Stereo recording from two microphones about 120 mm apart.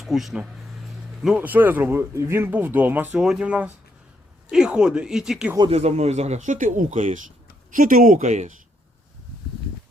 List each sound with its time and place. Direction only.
0.0 s speech: centre (ahead or behind)
1.4 s speech: 15° right (ahead or behind)
5.7 s speech: 65° right (ahead or behind); by 8.5 s 90° right